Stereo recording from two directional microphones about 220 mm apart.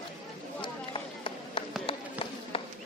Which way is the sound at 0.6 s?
25° left (ahead or behind).